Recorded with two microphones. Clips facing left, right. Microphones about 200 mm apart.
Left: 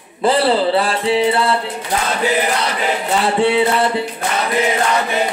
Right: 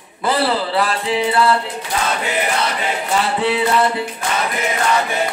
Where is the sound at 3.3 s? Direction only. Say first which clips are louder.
Left 8 dB; 25° left (ahead or behind).